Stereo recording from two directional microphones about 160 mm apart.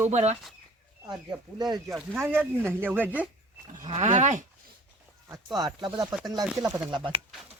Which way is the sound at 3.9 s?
45° right (ahead or behind).